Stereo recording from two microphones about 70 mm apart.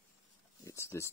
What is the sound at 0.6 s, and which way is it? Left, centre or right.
Speech, left.